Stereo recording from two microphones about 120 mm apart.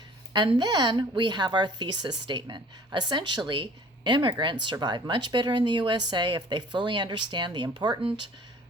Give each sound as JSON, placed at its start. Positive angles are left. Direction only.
{"t": 0.3, "sound": "a woman's voice", "side_deg": -35}